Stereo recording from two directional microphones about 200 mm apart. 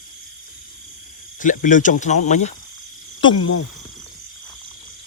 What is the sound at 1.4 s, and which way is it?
Speech, 40° left (ahead or behind).